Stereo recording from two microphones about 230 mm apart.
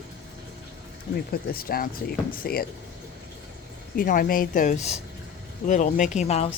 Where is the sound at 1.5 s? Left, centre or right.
Left.